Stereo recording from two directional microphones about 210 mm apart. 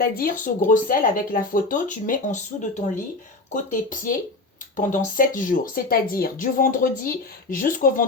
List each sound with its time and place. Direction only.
0.0 s speech: 45° left (ahead or behind)